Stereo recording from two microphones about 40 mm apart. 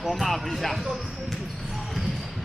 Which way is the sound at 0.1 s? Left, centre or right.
Centre.